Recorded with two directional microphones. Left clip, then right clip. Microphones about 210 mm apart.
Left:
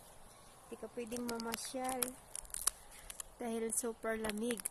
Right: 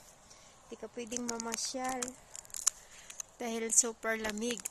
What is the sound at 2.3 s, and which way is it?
Biting, 10° right (ahead or behind).